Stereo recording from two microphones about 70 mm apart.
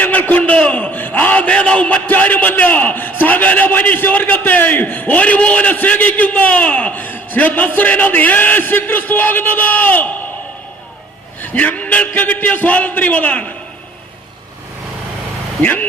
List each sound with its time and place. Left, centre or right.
0.0 s a man's voice: left
11.4 s a man's voice: left
15.6 s a man's voice: left